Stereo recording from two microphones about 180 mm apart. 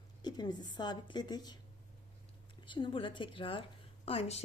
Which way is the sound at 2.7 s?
25° left (ahead or behind).